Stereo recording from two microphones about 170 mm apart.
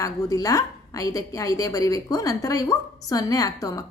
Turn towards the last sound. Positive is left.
turn(degrees=20)  # may be behind; listen again after turning